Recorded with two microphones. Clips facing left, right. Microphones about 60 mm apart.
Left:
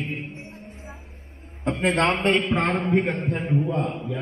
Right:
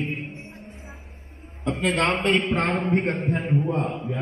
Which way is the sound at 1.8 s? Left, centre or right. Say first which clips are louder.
Left 1 dB; left.